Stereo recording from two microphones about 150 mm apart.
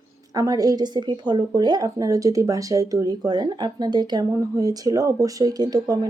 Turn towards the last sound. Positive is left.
turn(degrees=-25)  # may be behind; listen again after turning